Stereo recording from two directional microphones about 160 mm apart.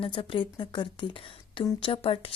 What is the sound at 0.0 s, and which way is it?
Speech, 35° left (ahead or behind).